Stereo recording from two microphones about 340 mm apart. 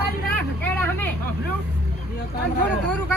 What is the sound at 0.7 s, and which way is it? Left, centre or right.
Vehicle, centre.